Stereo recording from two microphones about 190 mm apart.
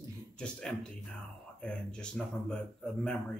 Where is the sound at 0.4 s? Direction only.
5° left (ahead or behind).